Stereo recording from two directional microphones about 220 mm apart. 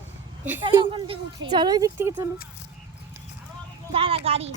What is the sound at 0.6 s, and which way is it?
Speech, 25° right (ahead or behind).